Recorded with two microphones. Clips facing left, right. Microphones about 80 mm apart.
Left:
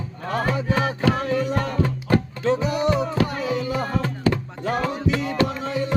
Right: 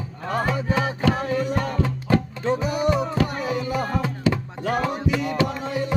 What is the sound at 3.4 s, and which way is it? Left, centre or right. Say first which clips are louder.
Music: left 1 dB; right.